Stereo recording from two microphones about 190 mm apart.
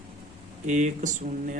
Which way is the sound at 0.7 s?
40° right (ahead or behind).